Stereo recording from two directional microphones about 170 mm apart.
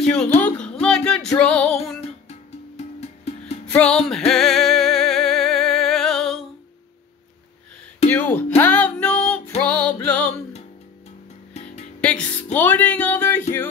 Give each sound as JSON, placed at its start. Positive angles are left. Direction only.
{"t": 0.0, "sound": "speech", "side_deg": 5}
{"t": 0.4, "sound": "a sound", "side_deg": 5}
{"t": 1.4, "sound": "music", "side_deg": 5}
{"t": 3.0, "sound": "music", "side_deg": 40}
{"t": 4.3, "sound": "music", "side_deg": 0}
{"t": 8.1, "sound": "a sound", "side_deg": 10}
{"t": 9.6, "sound": "music", "side_deg": 10}
{"t": 12.0, "sound": "music", "side_deg": 5}
{"t": 12.5, "sound": "speech", "side_deg": 10}